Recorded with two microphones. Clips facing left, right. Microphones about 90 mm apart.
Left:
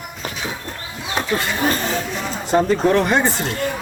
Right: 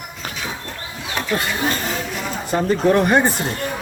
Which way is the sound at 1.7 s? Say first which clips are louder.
Left 2 dB; 35° left (ahead or behind).